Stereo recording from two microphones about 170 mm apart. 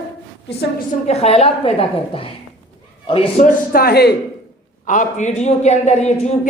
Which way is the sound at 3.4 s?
60° left (ahead or behind).